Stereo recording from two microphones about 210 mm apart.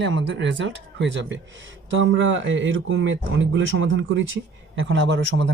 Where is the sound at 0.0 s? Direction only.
60° right (ahead or behind).